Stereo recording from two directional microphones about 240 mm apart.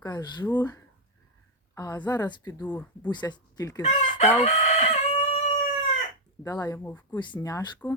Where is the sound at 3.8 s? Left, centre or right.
Left.